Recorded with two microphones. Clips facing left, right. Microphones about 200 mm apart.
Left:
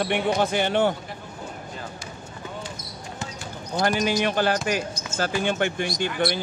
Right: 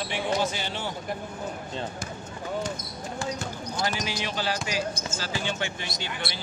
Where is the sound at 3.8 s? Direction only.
55° left (ahead or behind).